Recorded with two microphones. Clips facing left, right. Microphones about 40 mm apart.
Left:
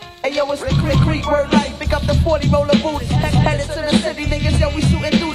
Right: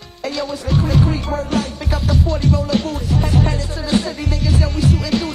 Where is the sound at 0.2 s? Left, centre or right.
Left.